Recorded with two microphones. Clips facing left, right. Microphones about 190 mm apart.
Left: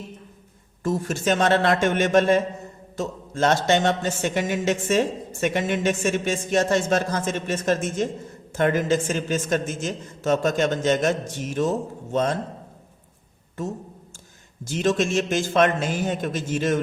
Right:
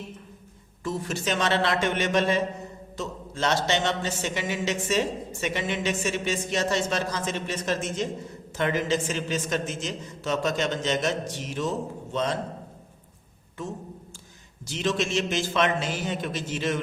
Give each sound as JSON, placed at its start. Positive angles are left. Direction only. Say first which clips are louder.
{"t": 0.9, "sound": "speech", "louder": "left 6 dB", "side_deg": 50}
{"t": 14.6, "sound": "speech", "louder": "left 5 dB", "side_deg": 50}